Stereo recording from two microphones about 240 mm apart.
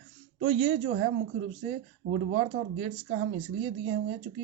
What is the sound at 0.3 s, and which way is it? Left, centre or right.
Speech, right.